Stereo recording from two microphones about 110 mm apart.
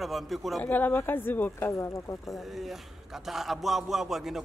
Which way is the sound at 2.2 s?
Centre (ahead or behind).